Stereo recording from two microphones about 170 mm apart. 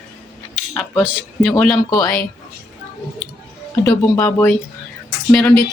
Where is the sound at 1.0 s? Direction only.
Centre (ahead or behind).